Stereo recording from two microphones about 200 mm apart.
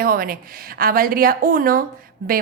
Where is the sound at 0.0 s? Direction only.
45° right (ahead or behind).